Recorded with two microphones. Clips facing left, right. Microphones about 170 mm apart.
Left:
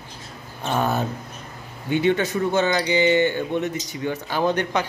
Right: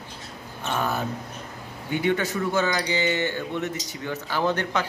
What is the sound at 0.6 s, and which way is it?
Speech, 30° left (ahead or behind).